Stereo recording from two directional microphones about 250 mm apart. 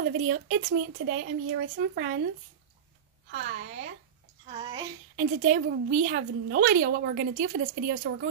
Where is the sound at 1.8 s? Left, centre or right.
Right.